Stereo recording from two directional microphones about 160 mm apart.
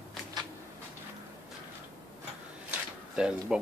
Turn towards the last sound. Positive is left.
turn(degrees=-5)  # may be behind; listen again after turning